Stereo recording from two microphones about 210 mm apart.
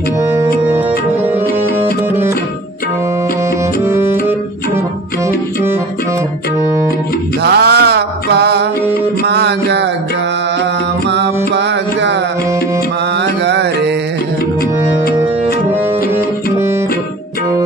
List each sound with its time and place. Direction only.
3.8 s music: 10° right (ahead or behind)
7.4 s mantra: 50° right (ahead or behind)
9.2 s music: 55° right (ahead or behind)
11.1 s music: 55° right (ahead or behind)
13.2 s music: 55° right (ahead or behind)